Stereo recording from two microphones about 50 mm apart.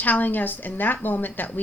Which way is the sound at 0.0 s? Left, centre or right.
Left.